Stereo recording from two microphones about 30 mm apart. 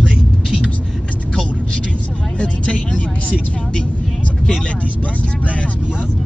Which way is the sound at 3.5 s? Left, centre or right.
Left.